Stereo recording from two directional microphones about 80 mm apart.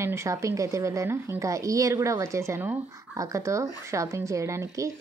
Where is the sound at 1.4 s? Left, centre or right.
Right.